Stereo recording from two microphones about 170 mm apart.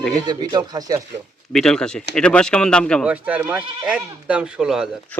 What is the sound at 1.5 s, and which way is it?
Speech, 5° left (ahead or behind).